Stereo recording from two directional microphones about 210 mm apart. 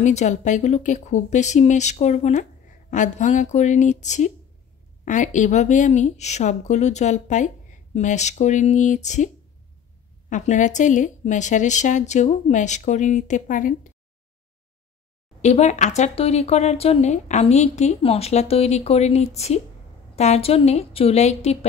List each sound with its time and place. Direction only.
0.0 s speech: 35° left (ahead or behind)
10.3 s speech: 35° left (ahead or behind)
15.4 s speech: 30° left (ahead or behind)